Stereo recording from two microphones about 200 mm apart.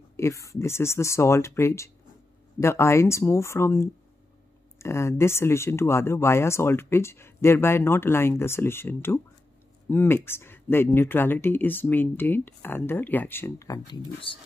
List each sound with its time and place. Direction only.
0.1 s speech: 15° left (ahead or behind)